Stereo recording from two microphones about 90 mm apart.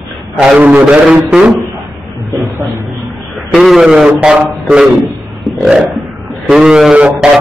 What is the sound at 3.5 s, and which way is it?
A man's voice, 5° right (ahead or behind).